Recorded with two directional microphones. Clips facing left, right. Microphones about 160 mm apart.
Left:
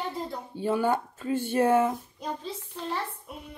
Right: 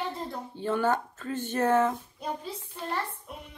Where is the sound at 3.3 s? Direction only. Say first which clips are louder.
Even; 5° left (ahead or behind).